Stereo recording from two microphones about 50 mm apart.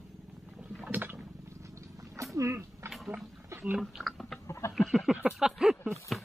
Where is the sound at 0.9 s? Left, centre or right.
Right.